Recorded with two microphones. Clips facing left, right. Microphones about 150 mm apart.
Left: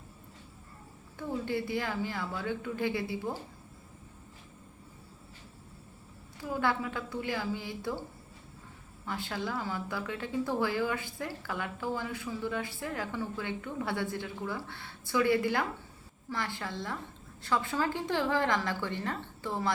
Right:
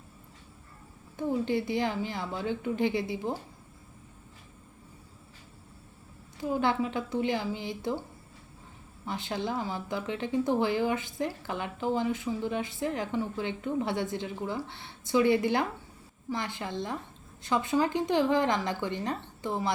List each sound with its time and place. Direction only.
1.1 s speech: 20° right (ahead or behind)
6.4 s speech: 20° right (ahead or behind)
9.0 s speech: 20° right (ahead or behind)